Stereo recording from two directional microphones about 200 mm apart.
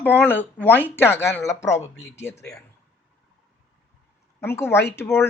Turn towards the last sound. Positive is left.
turn(degrees=10)  # may be behind; listen again after turning